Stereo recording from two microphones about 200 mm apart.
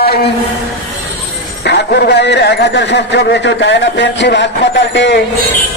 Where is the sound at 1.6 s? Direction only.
55° left (ahead or behind).